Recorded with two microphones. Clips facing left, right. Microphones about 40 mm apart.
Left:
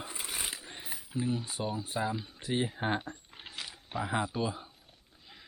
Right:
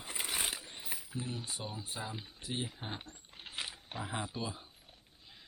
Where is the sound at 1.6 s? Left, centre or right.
Left.